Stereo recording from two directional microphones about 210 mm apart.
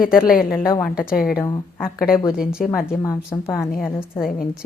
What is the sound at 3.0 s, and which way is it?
Speech, 15° left (ahead or behind).